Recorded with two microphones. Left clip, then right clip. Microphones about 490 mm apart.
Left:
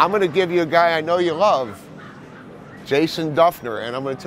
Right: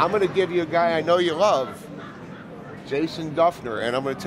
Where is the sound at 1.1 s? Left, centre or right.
Left.